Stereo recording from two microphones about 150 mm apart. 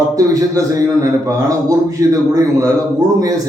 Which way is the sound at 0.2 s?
25° right (ahead or behind).